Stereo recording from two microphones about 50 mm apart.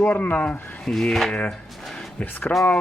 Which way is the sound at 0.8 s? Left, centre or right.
Centre.